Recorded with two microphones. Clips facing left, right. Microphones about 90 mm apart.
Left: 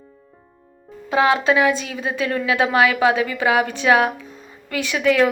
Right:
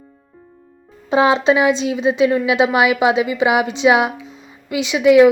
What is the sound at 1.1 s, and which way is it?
A woman's voice, 25° right (ahead or behind).